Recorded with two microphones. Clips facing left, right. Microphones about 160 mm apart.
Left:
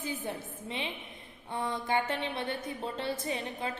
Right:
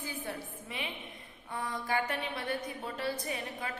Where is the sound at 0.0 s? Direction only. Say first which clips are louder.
Left 3 dB; 20° left (ahead or behind).